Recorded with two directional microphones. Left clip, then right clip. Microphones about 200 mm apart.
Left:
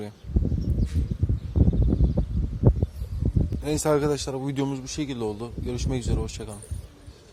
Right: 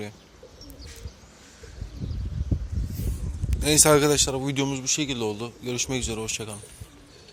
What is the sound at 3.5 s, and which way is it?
Speech, 5° right (ahead or behind).